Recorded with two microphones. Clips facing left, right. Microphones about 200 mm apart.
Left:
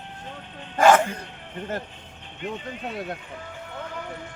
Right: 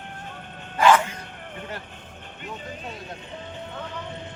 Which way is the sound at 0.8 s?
45° left (ahead or behind).